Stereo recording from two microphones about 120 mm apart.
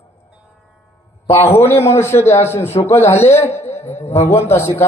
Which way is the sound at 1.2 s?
20° left (ahead or behind).